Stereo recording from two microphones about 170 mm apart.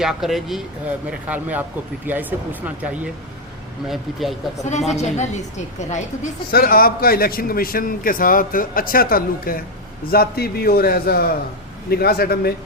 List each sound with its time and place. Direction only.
0.0 s speech: centre (ahead or behind)
4.9 s a woman's voice: 40° left (ahead or behind)
6.5 s a man's voice: 60° left (ahead or behind)